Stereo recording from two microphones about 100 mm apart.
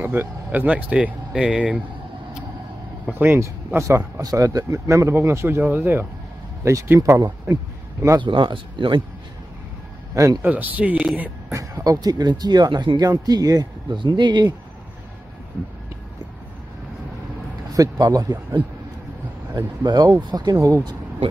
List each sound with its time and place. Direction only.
0.0 s speech: 20° right (ahead or behind)
3.1 s speech: 20° right (ahead or behind)
3.3 s speech: 30° right (ahead or behind)
8.2 s speech: 50° right (ahead or behind)
10.1 s speech: 35° right (ahead or behind)
10.4 s speech: 15° right (ahead or behind)
11.1 s a sound: 15° right (ahead or behind)
11.5 s speech: 35° right (ahead or behind); by 14.5 s 50° right (ahead or behind)
17.7 s speech: 35° right (ahead or behind)
20.6 s speech: 35° right (ahead or behind)